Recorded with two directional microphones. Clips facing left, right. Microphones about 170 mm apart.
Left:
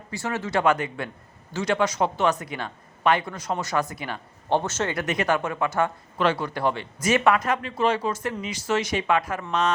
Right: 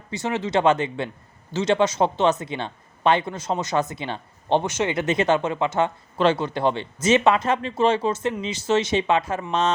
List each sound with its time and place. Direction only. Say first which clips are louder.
0.1 s speech: right 3 dB; 20° right (ahead or behind)